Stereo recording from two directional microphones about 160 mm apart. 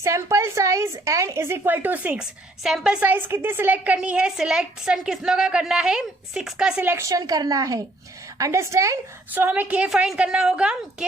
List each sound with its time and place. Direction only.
0.0 s a woman's voice: 20° right (ahead or behind)